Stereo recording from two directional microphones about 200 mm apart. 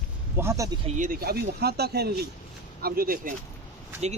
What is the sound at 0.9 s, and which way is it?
Speech, 45° right (ahead or behind).